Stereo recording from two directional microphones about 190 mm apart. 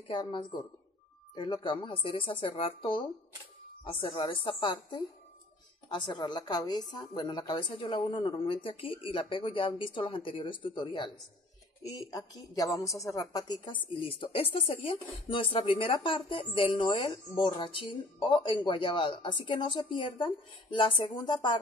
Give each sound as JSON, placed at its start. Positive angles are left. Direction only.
{"t": 0.1, "sound": "a woman's voice", "side_deg": 25}